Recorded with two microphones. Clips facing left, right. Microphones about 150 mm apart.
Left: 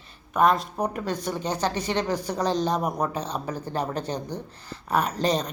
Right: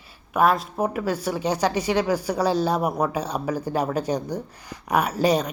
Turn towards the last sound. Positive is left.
turn(degrees=-10)  # may be behind; listen again after turning